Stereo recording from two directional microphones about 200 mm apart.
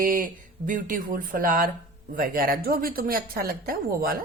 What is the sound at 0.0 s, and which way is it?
A woman's voice, 45° right (ahead or behind).